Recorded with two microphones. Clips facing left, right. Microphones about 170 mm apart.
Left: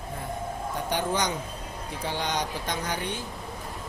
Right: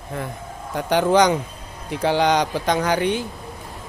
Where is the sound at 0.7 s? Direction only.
90° right.